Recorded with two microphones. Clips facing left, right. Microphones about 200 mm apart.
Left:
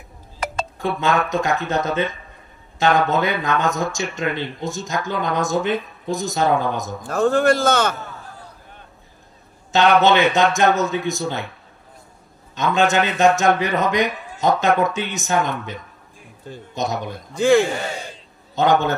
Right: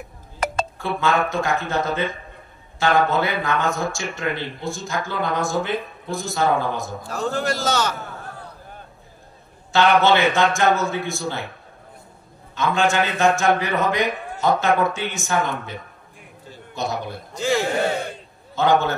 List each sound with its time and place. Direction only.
0.4 s music: 45° right (ahead or behind)
1.3 s a man's voice: 20° left (ahead or behind)
7.1 s a man's voice: 55° left (ahead or behind)
9.7 s a man's voice: 20° left (ahead or behind)
12.5 s a man's voice: 20° left (ahead or behind)
16.7 s a man's voice: 20° left (ahead or behind)
17.4 s a man's voice: 55° left (ahead or behind)
18.5 s speech: 20° left (ahead or behind)